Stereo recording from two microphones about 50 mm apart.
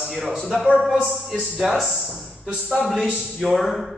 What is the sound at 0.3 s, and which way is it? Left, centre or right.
Speech, centre.